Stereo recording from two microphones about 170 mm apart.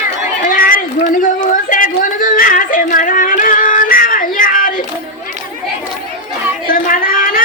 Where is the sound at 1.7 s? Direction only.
50° left (ahead or behind).